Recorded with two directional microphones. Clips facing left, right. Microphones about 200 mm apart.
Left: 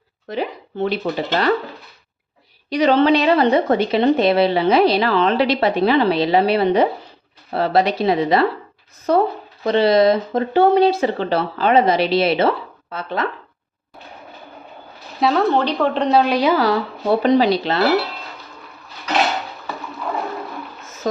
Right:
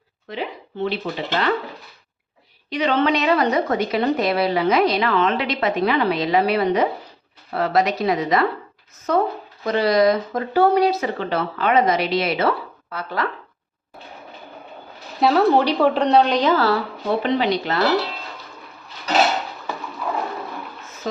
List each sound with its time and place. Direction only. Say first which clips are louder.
0.3 s a woman's voice: left 4 dB; 45° left (ahead or behind)
2.6 s a woman's voice: left 5 dB; 40° left (ahead or behind)
15.2 s speech: right 1 dB; 5° right (ahead or behind); by 16.8 s 15° left (ahead or behind)
17.2 s a woman's voice: left 7 dB; 35° left (ahead or behind)